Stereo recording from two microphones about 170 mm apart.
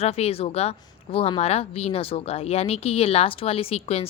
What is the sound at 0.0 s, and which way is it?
A woman's voice, 35° left (ahead or behind).